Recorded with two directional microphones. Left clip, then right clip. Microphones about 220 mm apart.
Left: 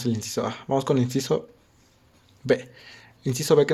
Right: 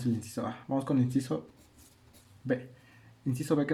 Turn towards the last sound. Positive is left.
turn(degrees=45)  # may be behind; listen again after turning